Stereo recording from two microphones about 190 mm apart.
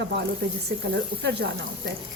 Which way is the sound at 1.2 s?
65° right (ahead or behind).